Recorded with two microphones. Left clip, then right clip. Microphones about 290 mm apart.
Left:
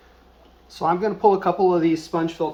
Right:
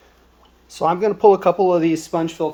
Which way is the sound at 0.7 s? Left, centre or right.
Right.